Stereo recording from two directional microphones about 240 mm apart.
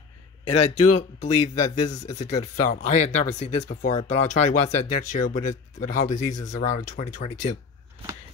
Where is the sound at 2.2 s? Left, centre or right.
Left.